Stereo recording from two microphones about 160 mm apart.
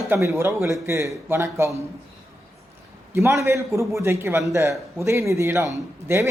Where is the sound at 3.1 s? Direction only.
15° right (ahead or behind).